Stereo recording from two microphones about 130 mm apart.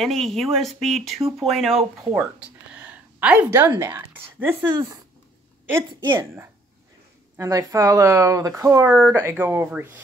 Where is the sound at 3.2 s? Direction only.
10° right (ahead or behind).